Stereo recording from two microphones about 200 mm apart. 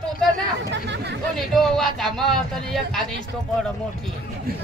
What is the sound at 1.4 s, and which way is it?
Speech, centre (ahead or behind).